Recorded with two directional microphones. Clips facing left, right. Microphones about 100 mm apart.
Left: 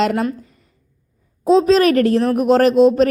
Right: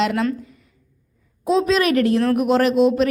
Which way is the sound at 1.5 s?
35° left (ahead or behind).